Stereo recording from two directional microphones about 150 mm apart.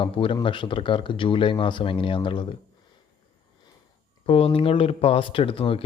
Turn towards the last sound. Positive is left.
turn(degrees=35)  # may be behind; listen again after turning